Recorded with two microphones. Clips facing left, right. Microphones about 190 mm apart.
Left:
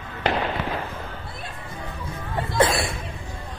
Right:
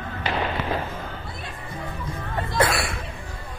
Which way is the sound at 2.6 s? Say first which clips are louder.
Left 2 dB; 20° left (ahead or behind).